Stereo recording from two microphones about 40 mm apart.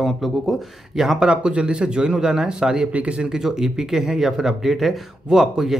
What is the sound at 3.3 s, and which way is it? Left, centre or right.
Speech, centre.